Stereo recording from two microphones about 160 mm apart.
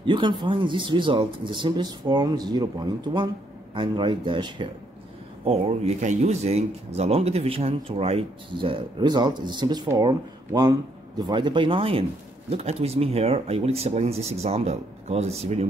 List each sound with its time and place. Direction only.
0.0 s speech: 30° right (ahead or behind)